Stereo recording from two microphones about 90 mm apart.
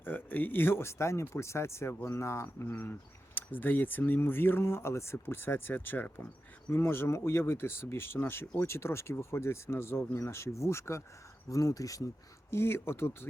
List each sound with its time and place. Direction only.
0.0 s speech: 20° left (ahead or behind); by 12.0 s 40° left (ahead or behind)
12.5 s speech: 25° left (ahead or behind)